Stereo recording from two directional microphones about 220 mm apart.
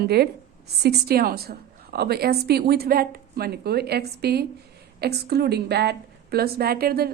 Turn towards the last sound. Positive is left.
turn(degrees=-45)  # may be behind; listen again after turning